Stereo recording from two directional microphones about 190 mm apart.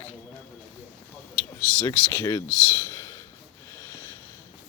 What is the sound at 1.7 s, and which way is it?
Speech, 15° left (ahead or behind).